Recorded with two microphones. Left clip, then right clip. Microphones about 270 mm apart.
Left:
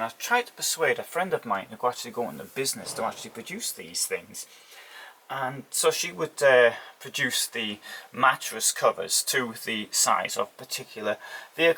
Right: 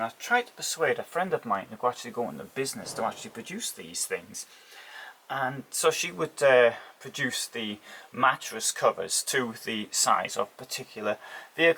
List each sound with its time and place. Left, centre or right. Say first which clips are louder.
0.0 s speech: left 1 dB; centre
2.6 s speech: left 1 dB; centre
5.3 s speech: even; centre